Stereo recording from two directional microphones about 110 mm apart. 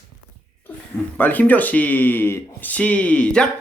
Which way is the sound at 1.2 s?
15° left (ahead or behind).